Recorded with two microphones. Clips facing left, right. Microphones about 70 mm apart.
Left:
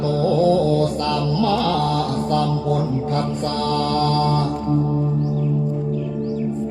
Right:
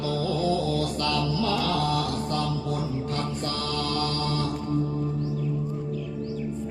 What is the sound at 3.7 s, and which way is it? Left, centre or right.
Mantra, left.